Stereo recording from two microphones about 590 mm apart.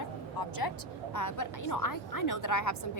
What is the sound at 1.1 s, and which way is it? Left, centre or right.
A woman's voice, left.